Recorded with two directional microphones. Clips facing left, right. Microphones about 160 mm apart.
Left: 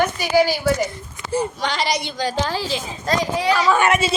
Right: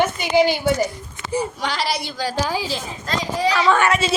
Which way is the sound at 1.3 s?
10° right (ahead or behind).